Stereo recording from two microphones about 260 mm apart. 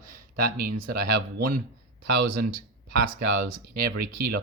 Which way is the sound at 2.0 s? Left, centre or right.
Right.